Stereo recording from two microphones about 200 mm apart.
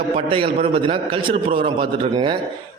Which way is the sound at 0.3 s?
25° right (ahead or behind).